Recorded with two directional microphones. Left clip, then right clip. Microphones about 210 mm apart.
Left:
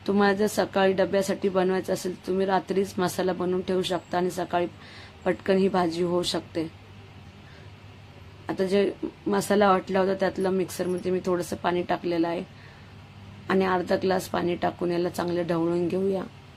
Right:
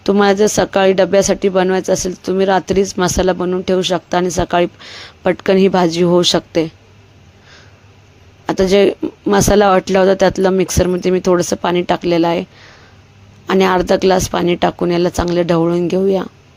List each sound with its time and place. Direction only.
0.0 s speech: 40° right (ahead or behind)
8.4 s speech: 45° right (ahead or behind)
13.5 s speech: 45° right (ahead or behind)